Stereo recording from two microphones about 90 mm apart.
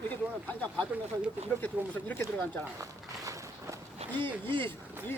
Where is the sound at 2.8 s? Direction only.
40° right (ahead or behind).